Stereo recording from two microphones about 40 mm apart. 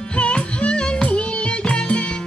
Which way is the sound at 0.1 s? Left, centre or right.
Left.